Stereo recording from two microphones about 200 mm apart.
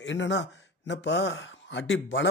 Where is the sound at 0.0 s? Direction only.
65° left (ahead or behind).